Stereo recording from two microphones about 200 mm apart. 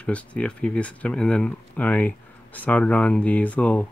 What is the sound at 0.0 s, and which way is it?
Speech, 5° left (ahead or behind).